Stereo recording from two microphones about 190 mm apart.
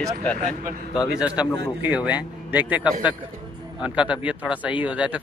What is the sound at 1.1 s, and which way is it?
Speech, 5° right (ahead or behind).